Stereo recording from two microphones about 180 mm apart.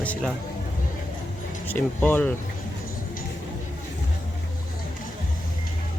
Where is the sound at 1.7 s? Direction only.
10° left (ahead or behind).